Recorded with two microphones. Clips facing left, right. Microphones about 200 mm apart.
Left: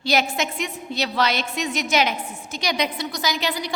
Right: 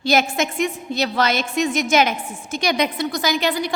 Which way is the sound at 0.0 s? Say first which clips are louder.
Right 3 dB; 50° right (ahead or behind).